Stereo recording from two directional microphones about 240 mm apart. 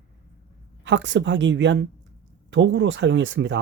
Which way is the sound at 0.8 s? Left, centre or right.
Right.